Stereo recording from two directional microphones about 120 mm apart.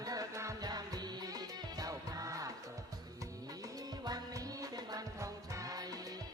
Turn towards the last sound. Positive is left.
turn(degrees=-30)  # may be behind; listen again after turning